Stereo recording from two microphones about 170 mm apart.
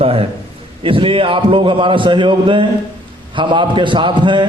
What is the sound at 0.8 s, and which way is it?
A man's voice, 30° right (ahead or behind).